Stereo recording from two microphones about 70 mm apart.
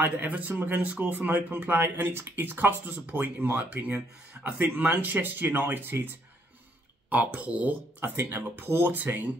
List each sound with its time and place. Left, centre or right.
0.3 s speech: right
7.1 s speech: right